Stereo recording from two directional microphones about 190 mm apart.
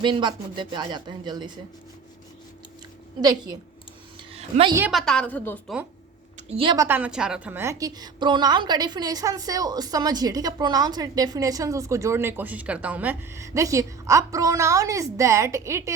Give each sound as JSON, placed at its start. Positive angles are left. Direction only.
{"t": 0.0, "sound": "speech", "side_deg": -25}
{"t": 4.3, "sound": "a sound", "side_deg": -30}
{"t": 4.9, "sound": "a woman's voice", "side_deg": 0}
{"t": 6.5, "sound": "speech", "side_deg": -30}
{"t": 6.7, "sound": "a woman's voice", "side_deg": -10}